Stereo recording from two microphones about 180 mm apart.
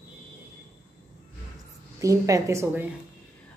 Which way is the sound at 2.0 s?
20° right (ahead or behind).